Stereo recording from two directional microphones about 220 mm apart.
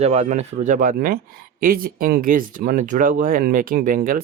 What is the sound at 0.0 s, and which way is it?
Speech, 30° right (ahead or behind).